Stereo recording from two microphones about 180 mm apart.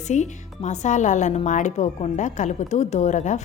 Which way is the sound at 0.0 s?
40° left (ahead or behind).